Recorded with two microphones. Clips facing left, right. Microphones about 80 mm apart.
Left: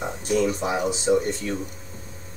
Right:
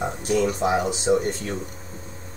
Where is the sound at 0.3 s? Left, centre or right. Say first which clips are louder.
Right 1 dB; right.